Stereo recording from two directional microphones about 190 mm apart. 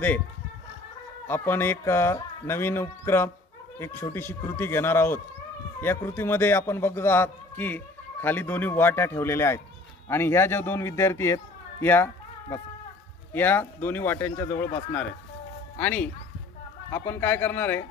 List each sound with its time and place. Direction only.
1.2 s a man's voice: 10° left (ahead or behind)
15.8 s a man's voice: 10° left (ahead or behind)